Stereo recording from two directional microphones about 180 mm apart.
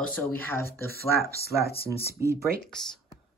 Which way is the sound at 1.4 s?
60° left (ahead or behind).